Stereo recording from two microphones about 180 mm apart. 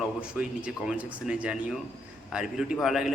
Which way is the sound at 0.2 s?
5° right (ahead or behind).